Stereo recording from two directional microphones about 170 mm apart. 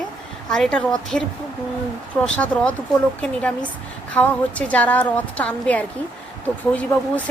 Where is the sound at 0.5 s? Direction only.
Centre (ahead or behind).